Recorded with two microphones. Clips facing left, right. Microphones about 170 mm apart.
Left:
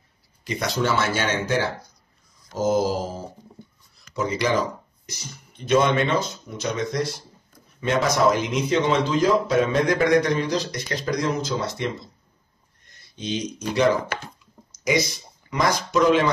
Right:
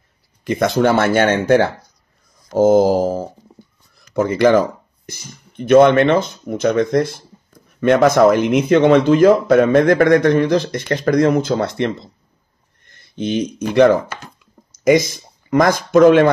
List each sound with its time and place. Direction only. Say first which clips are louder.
0.4 s speech: right 9 dB; 55° right (ahead or behind)
2.5 s mantra: right 10 dB; 55° right (ahead or behind)
3.9 s speech: right 8 dB; 55° right (ahead or behind)
13.1 s speech: right 8 dB; 55° right (ahead or behind)